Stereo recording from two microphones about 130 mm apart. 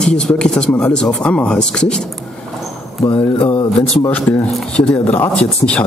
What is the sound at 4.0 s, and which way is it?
Speech, 10° left (ahead or behind).